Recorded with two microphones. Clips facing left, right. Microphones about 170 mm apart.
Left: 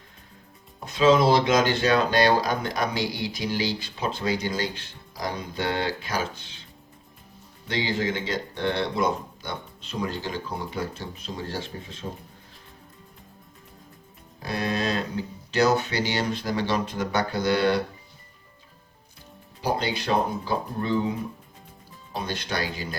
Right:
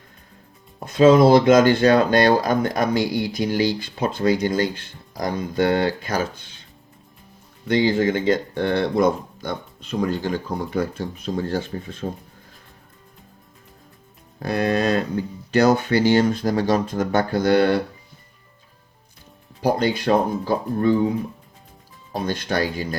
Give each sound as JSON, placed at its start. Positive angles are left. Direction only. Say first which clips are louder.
{"t": 0.9, "sound": "speech", "louder": "right 6 dB", "side_deg": -50}
{"t": 7.7, "sound": "speech", "louder": "right 8 dB", "side_deg": -50}
{"t": 14.3, "sound": "speech", "louder": "right 7 dB", "side_deg": -50}
{"t": 19.6, "sound": "speech", "louder": "right 7 dB", "side_deg": -50}
{"t": 22.1, "sound": "speech", "louder": "right 6 dB", "side_deg": -50}